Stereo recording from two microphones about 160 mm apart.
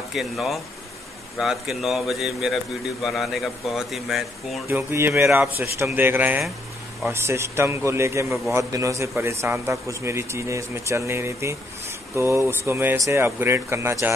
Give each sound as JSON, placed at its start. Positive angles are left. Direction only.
{"t": 0.1, "sound": "speech", "side_deg": 0}
{"t": 4.6, "sound": "speech", "side_deg": -15}